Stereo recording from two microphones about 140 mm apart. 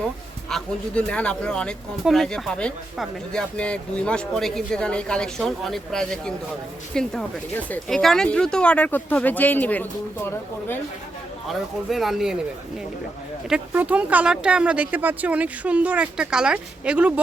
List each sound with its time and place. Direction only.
0.5 s speech: 5° left (ahead or behind)
11.4 s speech: centre (ahead or behind)
13.5 s speech: 10° right (ahead or behind)